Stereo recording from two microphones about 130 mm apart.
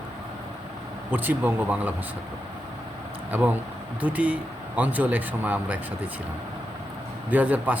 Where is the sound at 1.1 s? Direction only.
15° right (ahead or behind).